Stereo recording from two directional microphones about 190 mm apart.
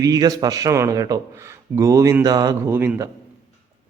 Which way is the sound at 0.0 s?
20° right (ahead or behind).